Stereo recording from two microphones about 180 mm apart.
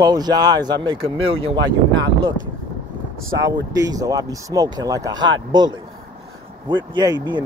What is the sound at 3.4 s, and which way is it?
Speech, 20° right (ahead or behind).